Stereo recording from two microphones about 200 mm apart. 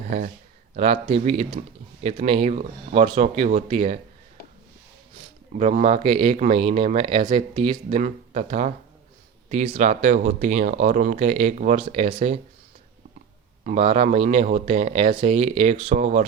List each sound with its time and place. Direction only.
0.7 s speech: 40° right (ahead or behind)
5.5 s speech: 30° right (ahead or behind)
13.7 s speech: 35° right (ahead or behind)